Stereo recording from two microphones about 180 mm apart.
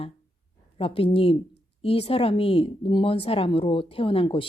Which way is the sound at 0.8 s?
30° left (ahead or behind).